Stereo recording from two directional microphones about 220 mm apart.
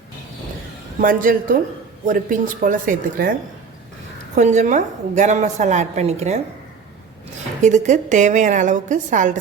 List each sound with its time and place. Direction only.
1.0 s a woman's voice: 40° right (ahead or behind)
4.4 s a woman's voice: 35° right (ahead or behind)
7.6 s a woman's voice: 35° right (ahead or behind)